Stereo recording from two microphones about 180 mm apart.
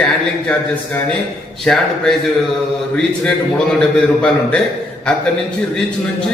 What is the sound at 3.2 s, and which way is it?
A man's voice, 5° left (ahead or behind).